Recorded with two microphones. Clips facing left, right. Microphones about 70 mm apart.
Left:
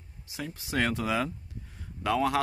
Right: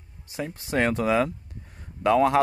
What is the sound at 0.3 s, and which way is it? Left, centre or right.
Speech, right.